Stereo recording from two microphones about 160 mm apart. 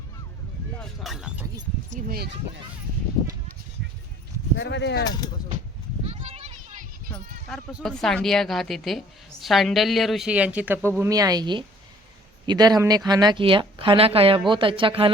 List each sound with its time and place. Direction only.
0.8 s a sound: centre (ahead or behind)
1.9 s speech: 55° right (ahead or behind)
4.5 s speech: 90° left
5.0 s speech: 25° left (ahead or behind)
6.1 s a sound: 40° right (ahead or behind)
7.5 s a woman's voice: centre (ahead or behind); by 15.1 s 35° right (ahead or behind)